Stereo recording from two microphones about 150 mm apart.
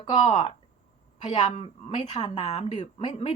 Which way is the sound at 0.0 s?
40° left (ahead or behind).